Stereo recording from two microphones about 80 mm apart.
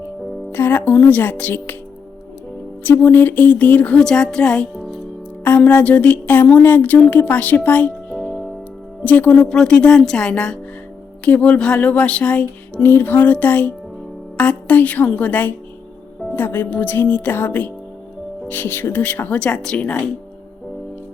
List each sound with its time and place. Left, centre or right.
0.5 s speech: left
2.8 s speech: left